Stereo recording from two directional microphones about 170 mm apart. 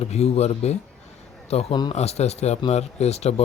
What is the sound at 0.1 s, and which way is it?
A man's voice, 40° left (ahead or behind).